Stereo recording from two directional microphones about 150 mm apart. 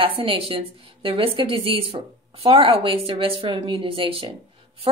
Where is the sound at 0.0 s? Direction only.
35° right (ahead or behind).